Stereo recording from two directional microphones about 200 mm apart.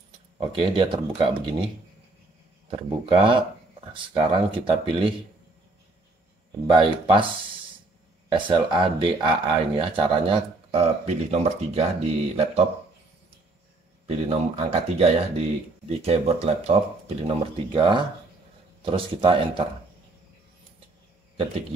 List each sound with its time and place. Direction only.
0.4 s speech: 25° right (ahead or behind)
2.7 s speech: 25° right (ahead or behind)
6.7 s speech: 25° right (ahead or behind)
8.3 s speech: 25° right (ahead or behind)
14.0 s speech: 30° right (ahead or behind)